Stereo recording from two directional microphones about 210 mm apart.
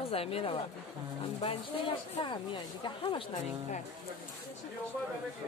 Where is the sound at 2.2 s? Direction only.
25° left (ahead or behind).